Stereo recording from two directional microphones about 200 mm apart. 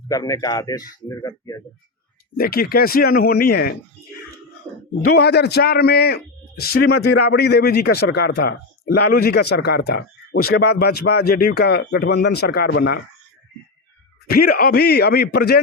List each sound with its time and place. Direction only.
0.1 s speech: 20° left (ahead or behind)
2.3 s a man's voice: 50° left (ahead or behind)
5.1 s a man's voice: 55° left (ahead or behind)
14.3 s a man's voice: 50° left (ahead or behind)